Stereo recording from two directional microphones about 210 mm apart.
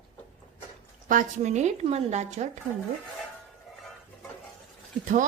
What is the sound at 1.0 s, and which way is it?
A woman's voice, 40° right (ahead or behind).